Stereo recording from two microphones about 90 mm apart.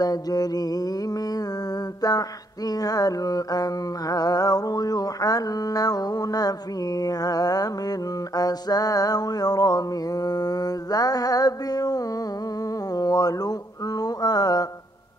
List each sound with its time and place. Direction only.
0.0 s music: 45° left (ahead or behind)